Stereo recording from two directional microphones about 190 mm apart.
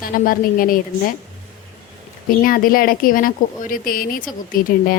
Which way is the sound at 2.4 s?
50° left (ahead or behind).